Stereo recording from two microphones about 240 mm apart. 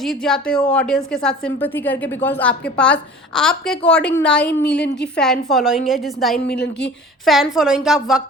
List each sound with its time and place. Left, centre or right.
0.0 s a woman's voice: centre
4.6 s a woman's voice: left
5.1 s a woman's voice: centre
6.5 s a woman's voice: left
6.8 s a woman's voice: centre